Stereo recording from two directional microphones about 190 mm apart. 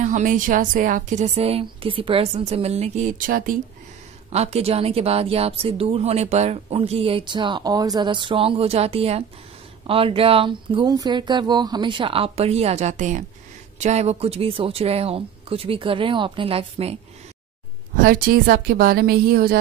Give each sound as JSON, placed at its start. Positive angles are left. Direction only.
{"t": 0.0, "sound": "a woman's voice", "side_deg": -40}
{"t": 4.3, "sound": "a woman's voice", "side_deg": -35}
{"t": 18.0, "sound": "a woman's voice", "side_deg": -50}